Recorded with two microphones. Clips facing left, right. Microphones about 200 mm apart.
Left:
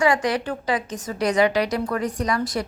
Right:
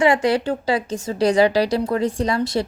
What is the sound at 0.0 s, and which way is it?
A woman's voice, 25° right (ahead or behind).